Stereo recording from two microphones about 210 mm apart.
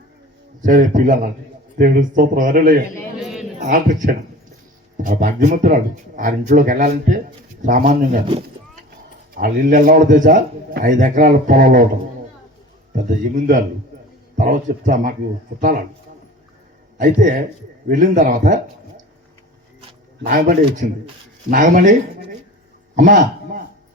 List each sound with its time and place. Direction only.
0.6 s speech: 40° right (ahead or behind)
3.2 s a sound: centre (ahead or behind)
3.7 s speech: 40° right (ahead or behind)
9.3 s speech: 40° right (ahead or behind)
12.9 s speech: 40° right (ahead or behind)
17.0 s speech: 40° right (ahead or behind)
20.2 s speech: 40° right (ahead or behind)
23.0 s speech: 40° right (ahead or behind)